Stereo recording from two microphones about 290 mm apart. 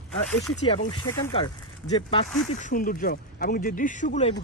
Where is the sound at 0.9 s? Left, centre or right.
Centre.